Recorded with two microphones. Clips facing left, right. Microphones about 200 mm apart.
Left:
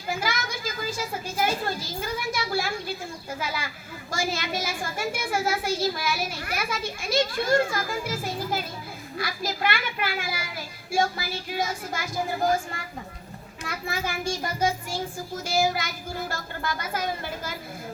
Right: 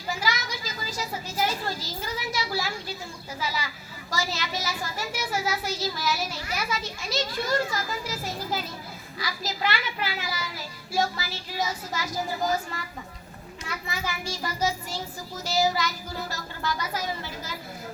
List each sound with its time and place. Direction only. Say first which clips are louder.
0.1 s a child's voice: left 1 dB; 55° left (ahead or behind)
13.8 s a child's voice: left 5 dB; 50° left (ahead or behind)